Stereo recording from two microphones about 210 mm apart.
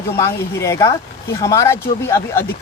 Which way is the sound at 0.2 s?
15° left (ahead or behind).